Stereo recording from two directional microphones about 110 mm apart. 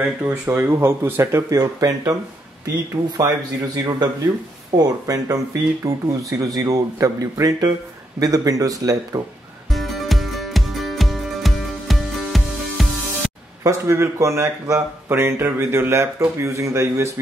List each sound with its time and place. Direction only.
0.0 s speech: 20° right (ahead or behind)
3.2 s speech: 35° right (ahead or behind)
9.7 s music: centre (ahead or behind)
13.7 s speech: 25° right (ahead or behind)